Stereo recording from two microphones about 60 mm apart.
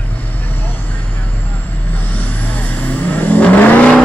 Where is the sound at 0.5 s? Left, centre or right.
Left.